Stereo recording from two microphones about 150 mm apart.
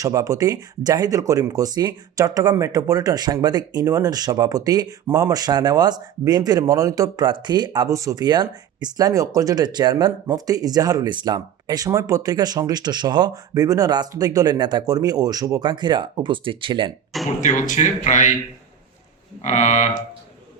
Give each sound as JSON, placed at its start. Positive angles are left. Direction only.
{"t": 0.0, "sound": "speech", "side_deg": -20}
{"t": 17.4, "sound": "speech", "side_deg": 55}
{"t": 19.4, "sound": "speech", "side_deg": 55}